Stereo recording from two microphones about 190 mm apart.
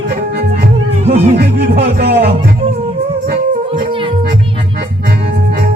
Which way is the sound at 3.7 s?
30° right (ahead or behind).